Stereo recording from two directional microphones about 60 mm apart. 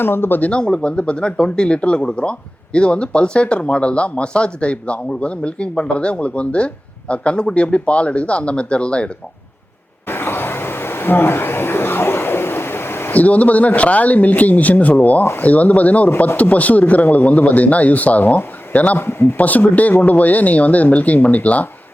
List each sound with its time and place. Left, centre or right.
0.0 s speech: left
0.6 s speech: centre
10.1 s a sound: left
13.1 s speech: left
18.9 s speech: left
19.4 s speech: left